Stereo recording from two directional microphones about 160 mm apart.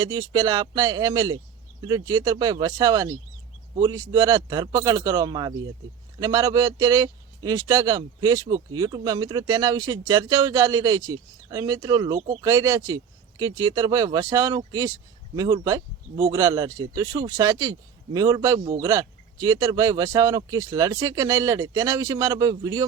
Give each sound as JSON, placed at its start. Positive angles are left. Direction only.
{"t": 0.0, "sound": "speech", "side_deg": -25}